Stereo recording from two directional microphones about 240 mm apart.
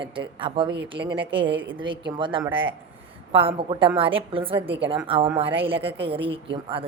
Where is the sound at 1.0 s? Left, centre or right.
Right.